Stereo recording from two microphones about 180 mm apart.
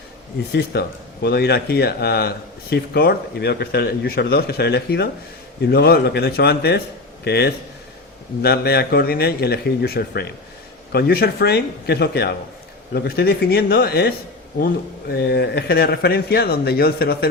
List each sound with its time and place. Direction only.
0.5 s speech: 65° left (ahead or behind)
15.1 s speech: 65° left (ahead or behind)